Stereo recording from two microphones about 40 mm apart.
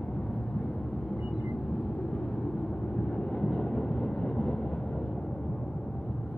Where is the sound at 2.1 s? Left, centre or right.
Centre.